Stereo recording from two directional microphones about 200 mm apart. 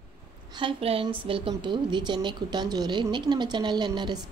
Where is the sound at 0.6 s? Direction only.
25° right (ahead or behind).